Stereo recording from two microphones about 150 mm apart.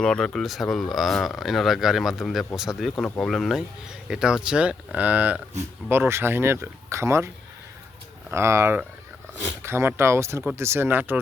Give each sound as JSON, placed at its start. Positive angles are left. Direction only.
{"t": 0.0, "sound": "speech", "side_deg": 5}
{"t": 8.3, "sound": "speech", "side_deg": -20}